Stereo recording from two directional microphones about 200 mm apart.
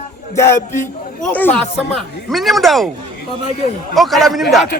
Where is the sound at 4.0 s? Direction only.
Centre (ahead or behind).